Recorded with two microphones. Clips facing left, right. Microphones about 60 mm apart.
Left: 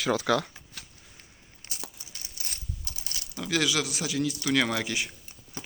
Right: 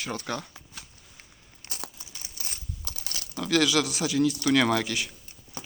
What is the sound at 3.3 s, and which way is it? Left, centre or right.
Speech, centre.